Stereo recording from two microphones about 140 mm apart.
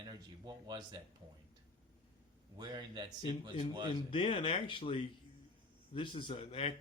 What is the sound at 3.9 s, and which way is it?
Speech, 40° left (ahead or behind).